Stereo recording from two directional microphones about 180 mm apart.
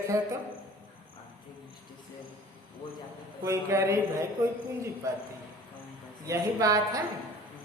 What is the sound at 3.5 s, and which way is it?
A woman's voice, 15° right (ahead or behind).